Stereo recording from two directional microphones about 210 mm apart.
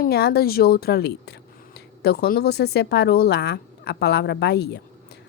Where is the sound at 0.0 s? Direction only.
50° left (ahead or behind).